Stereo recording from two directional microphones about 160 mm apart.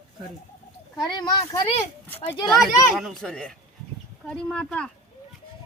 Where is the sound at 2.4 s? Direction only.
Centre (ahead or behind).